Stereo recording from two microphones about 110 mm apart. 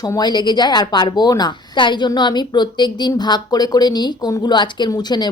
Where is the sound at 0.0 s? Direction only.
40° left (ahead or behind).